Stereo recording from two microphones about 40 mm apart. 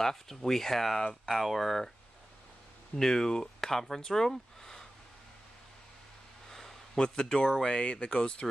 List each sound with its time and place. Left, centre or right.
0.0 s speech: centre
3.0 s speech: centre
6.5 s speech: centre